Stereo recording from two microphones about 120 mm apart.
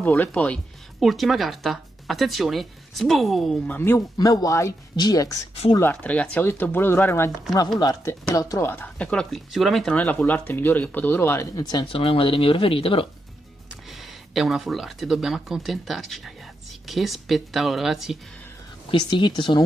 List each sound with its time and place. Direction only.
0.0 s speech: 15° left (ahead or behind)
1.0 s speech: centre (ahead or behind)
3.6 s speech: 15° left (ahead or behind)
4.2 s speech: 30° left (ahead or behind)
5.8 s speech: 15° left (ahead or behind)
11.5 s speech: 35° left (ahead or behind)
14.3 s speech: centre (ahead or behind)
18.9 s speech: 40° left (ahead or behind)